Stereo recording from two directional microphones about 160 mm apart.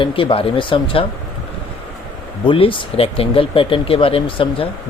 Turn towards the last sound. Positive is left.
turn(degrees=35)  # may be behind; listen again after turning